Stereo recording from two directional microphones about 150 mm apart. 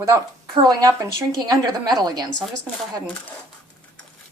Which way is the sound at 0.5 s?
25° right (ahead or behind).